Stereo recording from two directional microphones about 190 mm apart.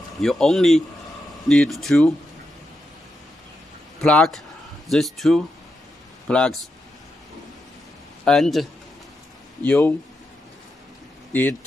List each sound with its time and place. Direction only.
0.2 s speech: centre (ahead or behind)
4.0 s speech: 5° left (ahead or behind)
8.3 s speech: centre (ahead or behind)